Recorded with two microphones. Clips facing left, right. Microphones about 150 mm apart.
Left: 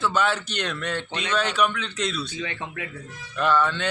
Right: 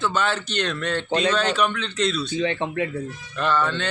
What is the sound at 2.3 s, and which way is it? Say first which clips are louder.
Speech: right 9 dB; 30° right (ahead or behind).